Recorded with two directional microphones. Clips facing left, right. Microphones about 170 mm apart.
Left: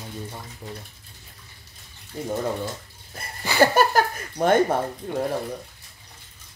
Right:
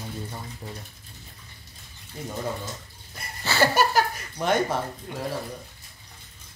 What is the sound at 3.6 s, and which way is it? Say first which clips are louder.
Speech: left 3 dB; 50° left (ahead or behind).